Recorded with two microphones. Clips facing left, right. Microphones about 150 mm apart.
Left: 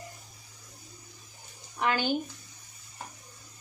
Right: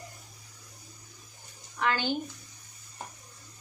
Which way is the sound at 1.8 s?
15° left (ahead or behind).